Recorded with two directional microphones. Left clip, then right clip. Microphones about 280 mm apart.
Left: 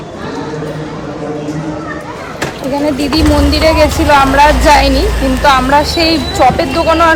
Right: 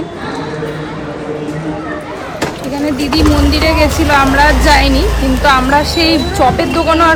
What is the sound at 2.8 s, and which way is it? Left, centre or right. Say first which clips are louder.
Speech: even; centre.